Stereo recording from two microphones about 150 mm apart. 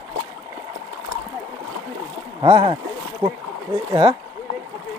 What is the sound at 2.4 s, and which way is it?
Speech, 35° right (ahead or behind).